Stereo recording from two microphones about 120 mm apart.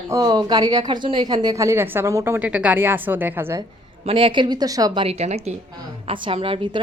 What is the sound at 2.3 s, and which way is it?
A woman's voice, 10° right (ahead or behind).